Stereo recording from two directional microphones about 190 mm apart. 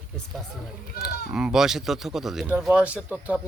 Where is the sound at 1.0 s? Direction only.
5° right (ahead or behind).